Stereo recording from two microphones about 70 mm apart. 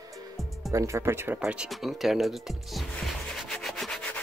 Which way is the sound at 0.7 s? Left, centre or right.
Right.